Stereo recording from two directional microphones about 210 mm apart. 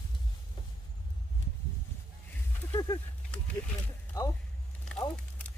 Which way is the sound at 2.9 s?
20° left (ahead or behind).